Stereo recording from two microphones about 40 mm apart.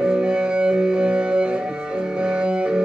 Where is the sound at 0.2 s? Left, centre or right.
Right.